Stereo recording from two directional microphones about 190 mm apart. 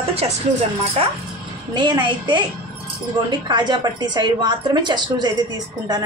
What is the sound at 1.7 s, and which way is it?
A woman's voice, 25° right (ahead or behind).